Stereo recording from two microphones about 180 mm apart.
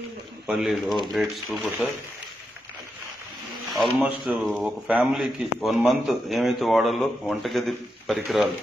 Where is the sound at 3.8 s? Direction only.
5° right (ahead or behind).